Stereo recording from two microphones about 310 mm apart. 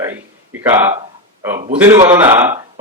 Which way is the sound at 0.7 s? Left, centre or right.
Centre.